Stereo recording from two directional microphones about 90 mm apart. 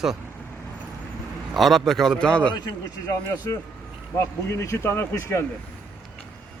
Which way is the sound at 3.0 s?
35° left (ahead or behind).